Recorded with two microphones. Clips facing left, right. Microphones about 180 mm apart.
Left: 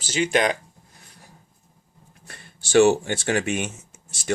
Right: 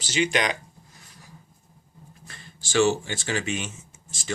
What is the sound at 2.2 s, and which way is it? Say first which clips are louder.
Speech: left 3 dB; 60° left (ahead or behind).